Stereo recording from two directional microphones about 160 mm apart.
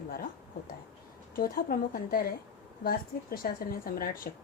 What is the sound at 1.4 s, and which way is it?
A woman's voice, 65° left (ahead or behind).